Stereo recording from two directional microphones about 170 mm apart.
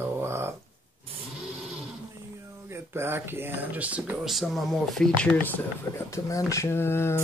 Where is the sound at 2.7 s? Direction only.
15° right (ahead or behind).